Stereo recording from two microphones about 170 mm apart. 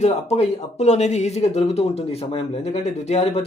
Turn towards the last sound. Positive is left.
turn(degrees=40)  # may be behind; listen again after turning